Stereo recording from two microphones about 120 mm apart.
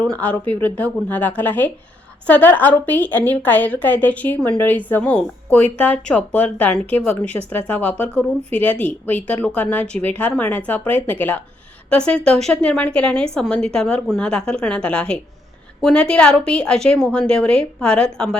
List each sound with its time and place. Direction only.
0.1 s a woman's voice: 10° left (ahead or behind)